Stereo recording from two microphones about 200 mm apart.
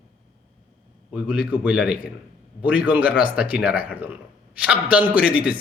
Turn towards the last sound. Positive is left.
turn(degrees=-5)  # may be behind; listen again after turning